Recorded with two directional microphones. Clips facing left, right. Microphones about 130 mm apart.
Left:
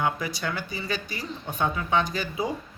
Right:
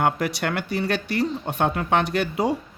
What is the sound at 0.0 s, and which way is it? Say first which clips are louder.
A man's voice: right 5 dB; 70° right (ahead or behind).